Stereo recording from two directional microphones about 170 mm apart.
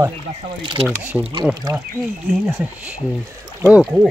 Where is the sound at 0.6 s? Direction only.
30° right (ahead or behind).